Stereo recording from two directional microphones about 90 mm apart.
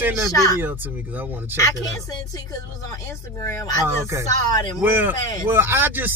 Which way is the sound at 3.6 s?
40° left (ahead or behind).